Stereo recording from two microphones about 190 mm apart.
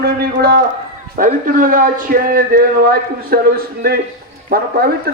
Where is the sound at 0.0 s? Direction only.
55° right (ahead or behind).